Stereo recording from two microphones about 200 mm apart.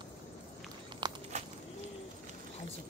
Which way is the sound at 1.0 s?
20° right (ahead or behind).